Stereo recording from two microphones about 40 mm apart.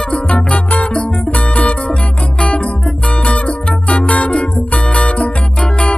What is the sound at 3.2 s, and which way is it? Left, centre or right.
Music, left.